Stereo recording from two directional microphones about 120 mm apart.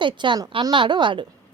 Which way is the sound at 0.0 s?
40° right (ahead or behind).